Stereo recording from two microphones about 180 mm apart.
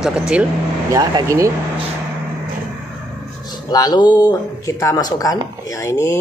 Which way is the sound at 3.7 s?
20° left (ahead or behind).